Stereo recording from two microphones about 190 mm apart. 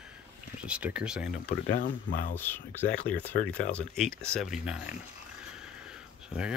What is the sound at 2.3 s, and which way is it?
Speech, 10° left (ahead or behind).